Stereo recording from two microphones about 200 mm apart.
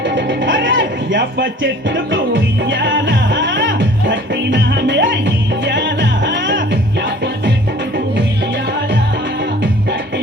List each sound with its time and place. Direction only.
0.1 s music: 65° right (ahead or behind)